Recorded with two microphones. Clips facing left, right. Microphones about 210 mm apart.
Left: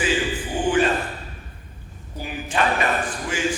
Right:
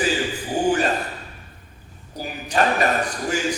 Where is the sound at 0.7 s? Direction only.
40° right (ahead or behind).